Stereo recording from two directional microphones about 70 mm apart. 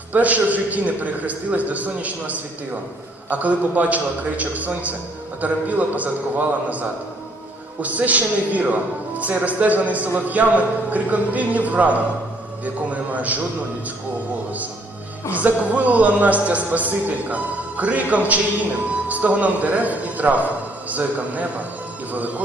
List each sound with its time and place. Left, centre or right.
0.1 s a man's voice: right
15.3 s a man's voice: right